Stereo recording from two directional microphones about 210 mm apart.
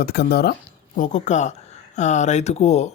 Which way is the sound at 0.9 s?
35° left (ahead or behind).